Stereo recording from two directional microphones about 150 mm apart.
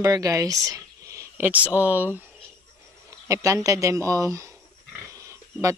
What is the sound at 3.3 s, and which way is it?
A woman's voice, 20° right (ahead or behind).